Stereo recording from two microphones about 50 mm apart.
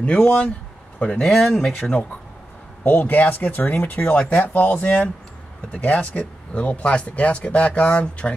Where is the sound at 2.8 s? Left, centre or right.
Left.